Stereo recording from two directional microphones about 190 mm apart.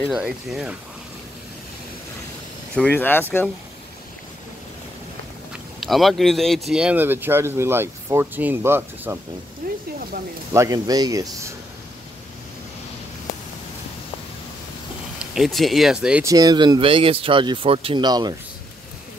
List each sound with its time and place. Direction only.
0.0 s speech: centre (ahead or behind)
2.7 s speech: 10° left (ahead or behind)
5.8 s speech: centre (ahead or behind)
9.6 s speech: 45° right (ahead or behind)
10.5 s speech: 15° right (ahead or behind)
15.3 s speech: centre (ahead or behind)
16.3 s speech: 20° right (ahead or behind)